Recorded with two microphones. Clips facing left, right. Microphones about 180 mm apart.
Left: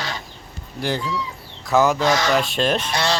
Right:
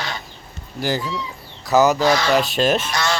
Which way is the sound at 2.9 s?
30° left (ahead or behind).